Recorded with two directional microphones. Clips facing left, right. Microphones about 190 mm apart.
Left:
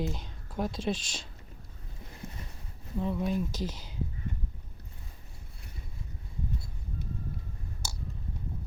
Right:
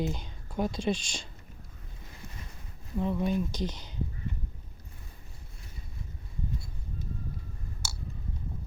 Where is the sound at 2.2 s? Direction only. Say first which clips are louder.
Left 5 dB; 50° left (ahead or behind).